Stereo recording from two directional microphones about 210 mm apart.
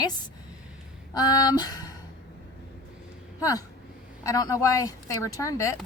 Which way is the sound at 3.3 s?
15° left (ahead or behind).